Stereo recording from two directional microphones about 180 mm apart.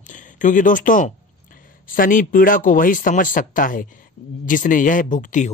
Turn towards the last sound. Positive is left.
turn(degrees=45)  # may be behind; listen again after turning